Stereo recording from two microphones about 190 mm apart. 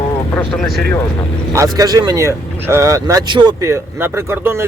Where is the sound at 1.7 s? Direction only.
20° right (ahead or behind).